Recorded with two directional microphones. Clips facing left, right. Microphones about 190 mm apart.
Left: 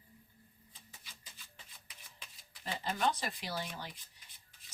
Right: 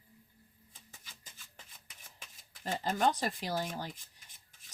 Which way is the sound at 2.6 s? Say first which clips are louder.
Right 4 dB; 45° right (ahead or behind).